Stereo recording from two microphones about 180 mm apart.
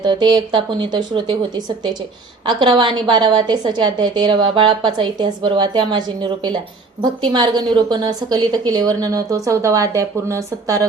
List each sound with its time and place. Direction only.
0.0 s a woman's voice: 25° right (ahead or behind)